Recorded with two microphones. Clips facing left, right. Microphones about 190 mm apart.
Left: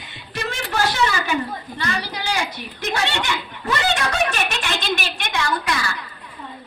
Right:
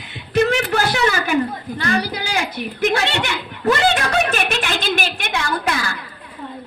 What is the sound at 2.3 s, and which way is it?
Snicker, 55° right (ahead or behind).